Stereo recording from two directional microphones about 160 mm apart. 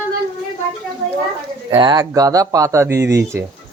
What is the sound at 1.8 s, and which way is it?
Speech, 25° right (ahead or behind).